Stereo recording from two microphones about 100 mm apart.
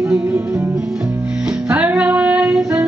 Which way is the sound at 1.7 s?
15° right (ahead or behind).